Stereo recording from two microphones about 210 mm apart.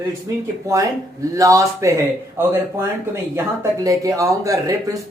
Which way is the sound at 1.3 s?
15° right (ahead or behind).